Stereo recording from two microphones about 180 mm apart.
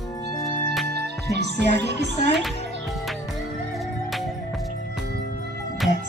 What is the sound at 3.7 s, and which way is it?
Music, centre (ahead or behind).